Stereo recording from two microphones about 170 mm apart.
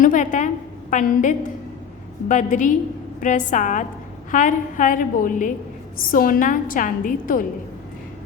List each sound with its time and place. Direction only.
0.0 s a woman's voice: 50° left (ahead or behind)